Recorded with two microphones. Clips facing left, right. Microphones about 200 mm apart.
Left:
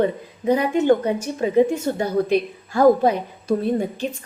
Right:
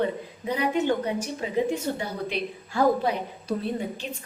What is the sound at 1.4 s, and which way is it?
A woman's voice, 50° left (ahead or behind).